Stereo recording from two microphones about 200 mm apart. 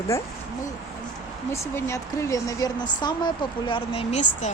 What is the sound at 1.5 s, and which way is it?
Speech, 15° left (ahead or behind).